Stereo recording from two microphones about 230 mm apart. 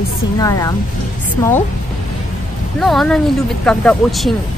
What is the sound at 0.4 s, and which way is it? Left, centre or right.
Speech, centre.